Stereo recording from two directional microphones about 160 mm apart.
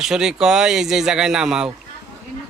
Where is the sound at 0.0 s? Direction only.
5° right (ahead or behind).